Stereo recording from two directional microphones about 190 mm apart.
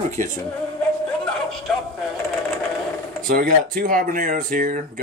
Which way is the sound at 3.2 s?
50° right (ahead or behind).